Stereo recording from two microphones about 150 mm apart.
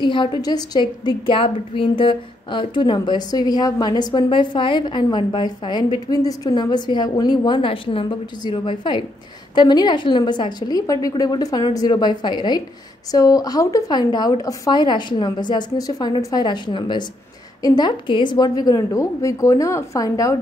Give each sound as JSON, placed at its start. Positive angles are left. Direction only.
{"t": 0.0, "sound": "a woman's voice", "side_deg": 30}